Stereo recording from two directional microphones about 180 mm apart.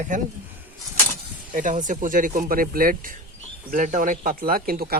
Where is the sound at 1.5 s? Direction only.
45° right (ahead or behind).